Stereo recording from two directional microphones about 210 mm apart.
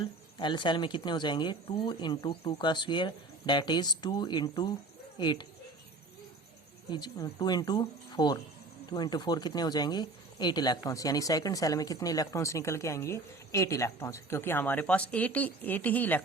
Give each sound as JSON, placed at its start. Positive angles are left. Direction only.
{"t": 0.3, "sound": "speech", "side_deg": 25}
{"t": 6.9, "sound": "speech", "side_deg": 20}